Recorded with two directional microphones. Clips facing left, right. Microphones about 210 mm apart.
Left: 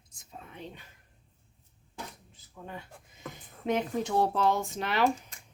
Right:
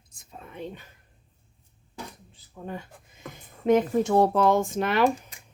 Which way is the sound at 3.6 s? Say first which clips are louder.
Right 8 dB; 45° right (ahead or behind).